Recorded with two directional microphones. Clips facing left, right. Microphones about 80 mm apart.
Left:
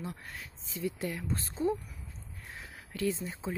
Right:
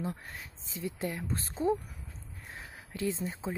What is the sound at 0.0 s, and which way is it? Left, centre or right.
Speech, right.